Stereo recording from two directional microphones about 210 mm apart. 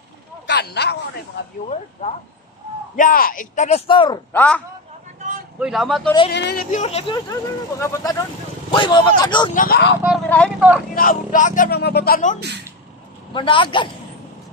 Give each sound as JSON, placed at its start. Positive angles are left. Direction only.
{"t": 0.5, "sound": "speech", "side_deg": 50}
{"t": 1.7, "sound": "speech", "side_deg": 30}
{"t": 3.0, "sound": "speech", "side_deg": 40}
{"t": 4.3, "sound": "speech", "side_deg": 10}
{"t": 5.6, "sound": "speech", "side_deg": 0}
{"t": 6.3, "sound": "speech", "side_deg": 50}
{"t": 7.8, "sound": "a man's voice", "side_deg": 15}
{"t": 9.5, "sound": "speech", "side_deg": 45}
{"t": 10.0, "sound": "speech", "side_deg": 5}
{"t": 11.0, "sound": "speech", "side_deg": 40}
{"t": 12.4, "sound": "speech", "side_deg": -50}
{"t": 13.3, "sound": "a man's voice", "side_deg": 25}